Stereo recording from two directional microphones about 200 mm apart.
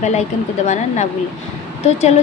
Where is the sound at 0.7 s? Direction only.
35° left (ahead or behind).